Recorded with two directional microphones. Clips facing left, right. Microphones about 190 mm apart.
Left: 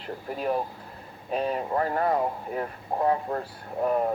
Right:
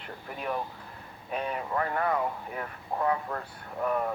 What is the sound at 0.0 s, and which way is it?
Speech, 35° left (ahead or behind).